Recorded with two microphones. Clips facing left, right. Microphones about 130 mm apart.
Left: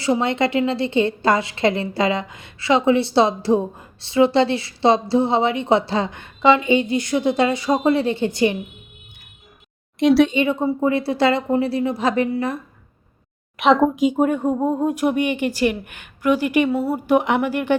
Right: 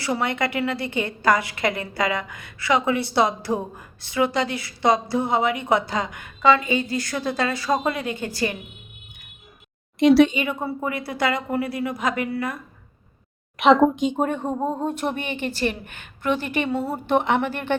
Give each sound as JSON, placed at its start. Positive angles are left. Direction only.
{"t": 0.0, "sound": "a woman's voice", "side_deg": 20}
{"t": 10.0, "sound": "speech", "side_deg": 0}
{"t": 10.3, "sound": "a woman's voice", "side_deg": 25}
{"t": 13.6, "sound": "speech", "side_deg": 0}